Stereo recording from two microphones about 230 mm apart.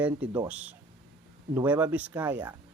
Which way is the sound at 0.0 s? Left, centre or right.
Centre.